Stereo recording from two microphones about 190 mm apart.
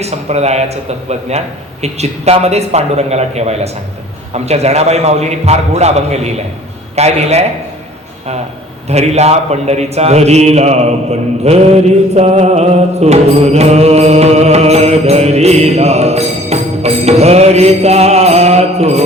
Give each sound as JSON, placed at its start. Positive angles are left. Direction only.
{"t": 0.0, "sound": "a man's voice", "side_deg": -35}
{"t": 8.9, "sound": "a man's voice", "side_deg": -35}